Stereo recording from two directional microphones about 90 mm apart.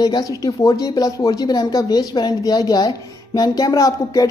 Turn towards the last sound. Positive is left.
turn(degrees=40)  # may be behind; listen again after turning